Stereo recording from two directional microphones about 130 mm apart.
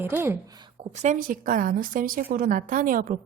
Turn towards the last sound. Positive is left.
turn(degrees=-90)